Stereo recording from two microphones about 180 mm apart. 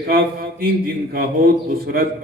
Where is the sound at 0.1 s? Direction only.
55° right (ahead or behind).